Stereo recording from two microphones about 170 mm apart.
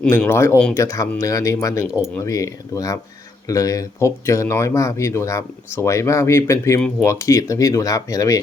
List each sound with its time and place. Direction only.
0.1 s speech: 15° left (ahead or behind)